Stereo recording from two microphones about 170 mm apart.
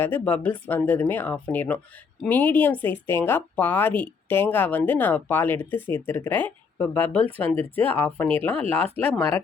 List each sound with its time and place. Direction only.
0.0 s speech: 10° left (ahead or behind)
8.6 s speech: 35° right (ahead or behind)
9.1 s speech: 15° left (ahead or behind)